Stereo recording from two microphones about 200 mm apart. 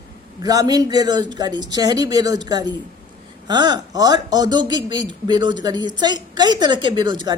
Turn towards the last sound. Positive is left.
turn(degrees=-20)  # may be behind; listen again after turning